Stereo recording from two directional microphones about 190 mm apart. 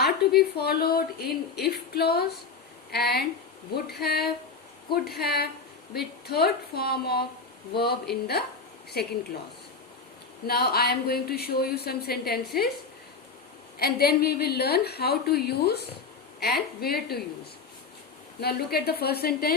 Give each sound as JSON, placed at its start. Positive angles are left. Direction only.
{"t": 0.0, "sound": "speech", "side_deg": 55}
{"t": 10.4, "sound": "speech", "side_deg": 55}
{"t": 13.7, "sound": "speech", "side_deg": 55}
{"t": 18.3, "sound": "speech", "side_deg": 55}